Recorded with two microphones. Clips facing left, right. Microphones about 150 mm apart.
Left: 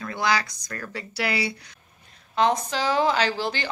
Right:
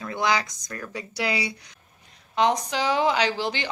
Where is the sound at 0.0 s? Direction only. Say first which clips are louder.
Even; 20° right (ahead or behind).